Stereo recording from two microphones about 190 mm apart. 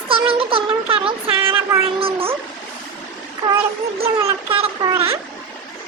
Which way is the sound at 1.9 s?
30° right (ahead or behind).